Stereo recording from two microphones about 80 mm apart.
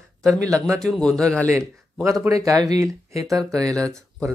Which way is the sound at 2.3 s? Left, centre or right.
Right.